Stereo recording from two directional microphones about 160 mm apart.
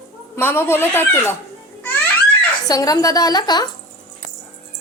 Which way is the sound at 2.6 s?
20° left (ahead or behind).